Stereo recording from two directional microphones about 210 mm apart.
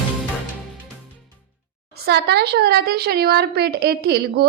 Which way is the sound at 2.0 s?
50° right (ahead or behind).